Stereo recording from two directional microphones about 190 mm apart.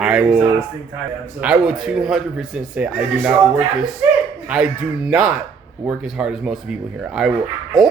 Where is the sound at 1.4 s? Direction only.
5° right (ahead or behind).